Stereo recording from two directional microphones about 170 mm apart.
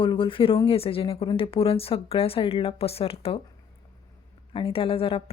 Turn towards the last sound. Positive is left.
turn(degrees=35)  # may be behind; listen again after turning